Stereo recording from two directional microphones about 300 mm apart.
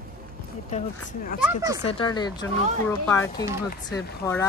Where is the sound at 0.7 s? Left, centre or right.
Left.